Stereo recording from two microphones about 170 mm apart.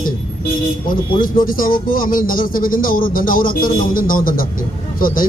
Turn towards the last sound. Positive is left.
turn(degrees=55)  # may be behind; listen again after turning